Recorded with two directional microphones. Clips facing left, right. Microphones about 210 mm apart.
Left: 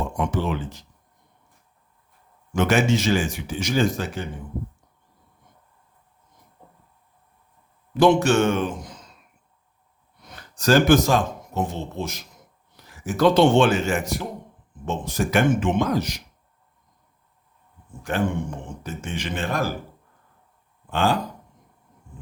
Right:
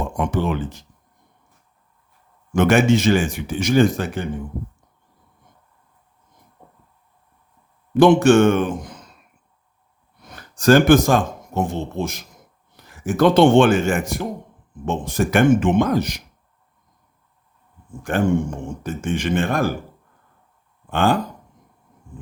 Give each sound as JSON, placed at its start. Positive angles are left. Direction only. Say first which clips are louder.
{"t": 0.2, "sound": "speech", "louder": "right 4 dB", "side_deg": -55}
{"t": 2.5, "sound": "speech", "louder": "right 5 dB", "side_deg": -55}
{"t": 7.9, "sound": "speech", "louder": "right 5 dB", "side_deg": -55}
{"t": 10.2, "sound": "a man's voice", "louder": "right 5 dB", "side_deg": -50}
{"t": 18.1, "sound": "speech", "louder": "right 5 dB", "side_deg": -50}
{"t": 20.9, "sound": "speech", "louder": "right 3 dB", "side_deg": -55}